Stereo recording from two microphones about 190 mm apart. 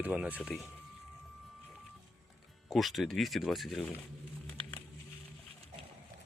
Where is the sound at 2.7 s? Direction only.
Centre (ahead or behind).